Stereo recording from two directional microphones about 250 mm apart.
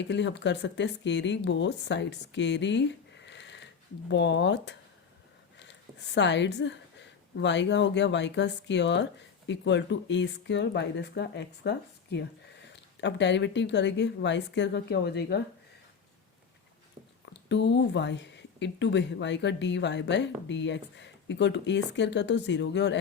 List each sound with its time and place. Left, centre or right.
0.0 s speech: left
3.2 s sniff: left
4.1 s a woman's voice: left
17.2 s speech: left